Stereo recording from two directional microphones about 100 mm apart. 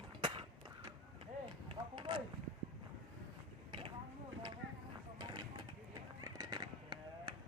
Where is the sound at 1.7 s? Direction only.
55° right (ahead or behind).